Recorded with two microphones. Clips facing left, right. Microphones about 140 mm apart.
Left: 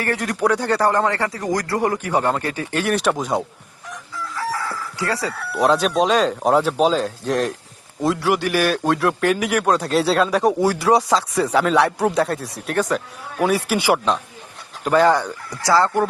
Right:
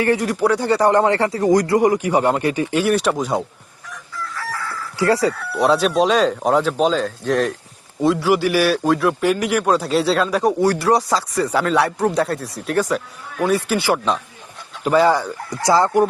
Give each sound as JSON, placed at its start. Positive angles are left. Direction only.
{"t": 0.0, "sound": "speech", "side_deg": -15}
{"t": 0.3, "sound": "a man's voice", "side_deg": 0}
{"t": 0.6, "sound": "speech", "side_deg": -10}
{"t": 1.7, "sound": "speech", "side_deg": -10}
{"t": 2.8, "sound": "a man's voice", "side_deg": 0}
{"t": 4.9, "sound": "speech", "side_deg": -25}
{"t": 5.4, "sound": "a man's voice", "side_deg": 0}
{"t": 14.8, "sound": "a man's voice", "side_deg": -5}
{"t": 15.6, "sound": "speech", "side_deg": -20}